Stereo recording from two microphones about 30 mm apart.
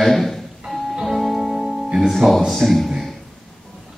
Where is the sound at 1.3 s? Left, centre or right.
Centre.